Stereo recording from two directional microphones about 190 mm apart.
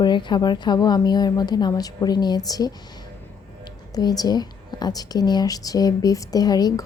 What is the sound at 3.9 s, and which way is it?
A woman's voice, 20° left (ahead or behind).